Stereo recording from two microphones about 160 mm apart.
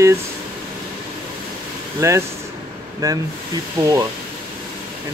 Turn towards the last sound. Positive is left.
turn(degrees=-20)  # may be behind; listen again after turning